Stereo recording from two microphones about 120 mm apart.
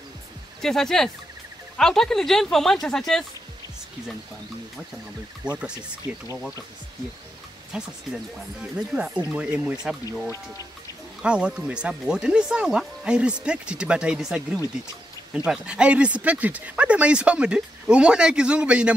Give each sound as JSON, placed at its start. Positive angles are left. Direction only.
{"t": 0.6, "sound": "speech", "side_deg": 5}
{"t": 5.4, "sound": "speech", "side_deg": -10}
{"t": 7.7, "sound": "speech", "side_deg": -5}
{"t": 11.2, "sound": "speech", "side_deg": -10}